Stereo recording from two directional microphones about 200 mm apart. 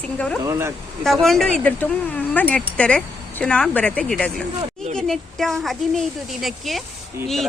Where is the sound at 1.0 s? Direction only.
Centre (ahead or behind).